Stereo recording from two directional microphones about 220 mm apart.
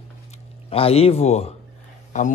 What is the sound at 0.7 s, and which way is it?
Speech, 25° left (ahead or behind).